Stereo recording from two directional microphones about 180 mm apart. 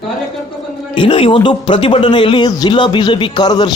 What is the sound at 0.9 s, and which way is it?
Speech, 30° left (ahead or behind).